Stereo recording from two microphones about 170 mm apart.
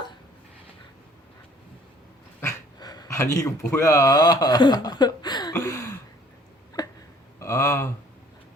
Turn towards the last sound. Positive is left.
turn(degrees=15)  # may be behind; listen again after turning